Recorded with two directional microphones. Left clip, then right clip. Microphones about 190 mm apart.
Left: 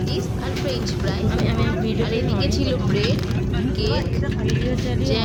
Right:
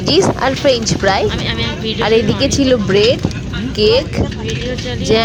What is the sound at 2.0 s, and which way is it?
Speech, 45° right (ahead or behind).